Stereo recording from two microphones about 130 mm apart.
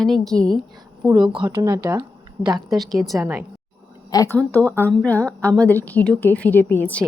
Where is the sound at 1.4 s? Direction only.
25° right (ahead or behind).